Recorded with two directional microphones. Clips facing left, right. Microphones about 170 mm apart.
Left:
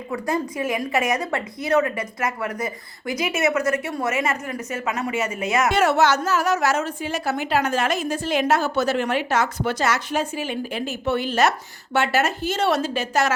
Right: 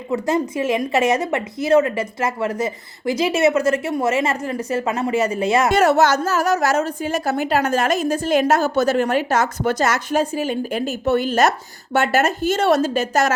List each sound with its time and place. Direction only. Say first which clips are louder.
0.1 s a woman's voice: right 5 dB; 25° right (ahead or behind); by 13.3 s 45° right (ahead or behind)